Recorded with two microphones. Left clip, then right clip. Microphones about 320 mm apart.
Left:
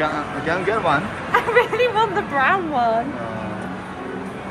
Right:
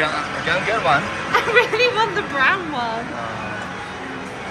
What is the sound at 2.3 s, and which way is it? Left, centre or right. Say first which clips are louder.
Speech: left 1 dB; left.